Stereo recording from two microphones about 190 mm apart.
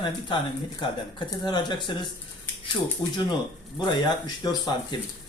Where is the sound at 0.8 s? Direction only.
25° left (ahead or behind).